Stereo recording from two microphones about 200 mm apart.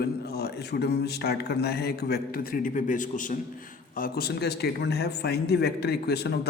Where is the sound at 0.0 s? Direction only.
50° left (ahead or behind).